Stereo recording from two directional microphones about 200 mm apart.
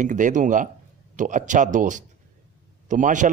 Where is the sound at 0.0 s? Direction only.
40° right (ahead or behind).